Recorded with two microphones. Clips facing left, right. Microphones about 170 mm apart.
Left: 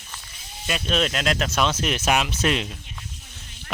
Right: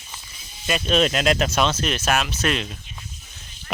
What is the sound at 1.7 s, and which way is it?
Speech, 15° left (ahead or behind).